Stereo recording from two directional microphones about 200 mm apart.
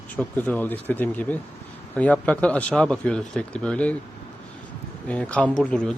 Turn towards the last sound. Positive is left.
turn(degrees=5)  # may be behind; listen again after turning